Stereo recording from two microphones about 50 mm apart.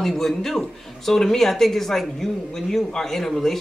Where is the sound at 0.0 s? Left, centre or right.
Centre.